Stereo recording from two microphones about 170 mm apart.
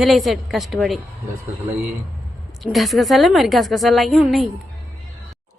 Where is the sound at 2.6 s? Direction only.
Centre (ahead or behind).